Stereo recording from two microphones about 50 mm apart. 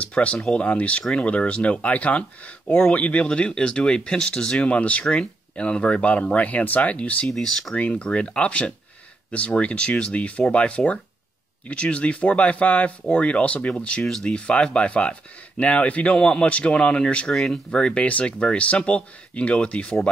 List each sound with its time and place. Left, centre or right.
0.0 s speech: left
5.0 s speech: centre
7.2 s speech: centre
7.7 s speech: left
17.3 s speech: centre
17.6 s speech: centre